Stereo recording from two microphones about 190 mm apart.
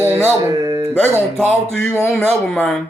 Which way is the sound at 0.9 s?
5° left (ahead or behind).